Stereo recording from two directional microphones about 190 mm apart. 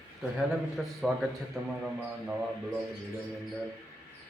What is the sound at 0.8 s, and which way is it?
Music, centre (ahead or behind).